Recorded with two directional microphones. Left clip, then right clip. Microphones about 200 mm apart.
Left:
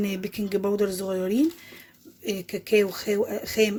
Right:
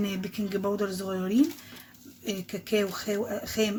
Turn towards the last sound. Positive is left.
turn(degrees=35)  # may be behind; listen again after turning